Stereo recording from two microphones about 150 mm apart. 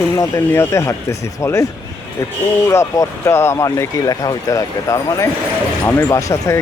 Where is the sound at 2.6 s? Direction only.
20° left (ahead or behind).